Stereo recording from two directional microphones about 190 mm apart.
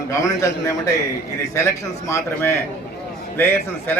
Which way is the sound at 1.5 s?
15° left (ahead or behind).